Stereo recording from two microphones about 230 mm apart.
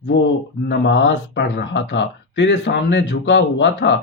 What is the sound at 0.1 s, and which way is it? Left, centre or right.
Speech, left.